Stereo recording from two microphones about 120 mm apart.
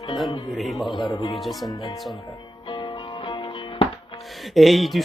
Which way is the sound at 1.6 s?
35° left (ahead or behind).